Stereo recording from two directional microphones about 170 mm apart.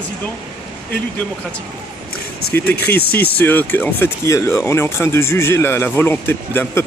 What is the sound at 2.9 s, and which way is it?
Speech, 70° left (ahead or behind).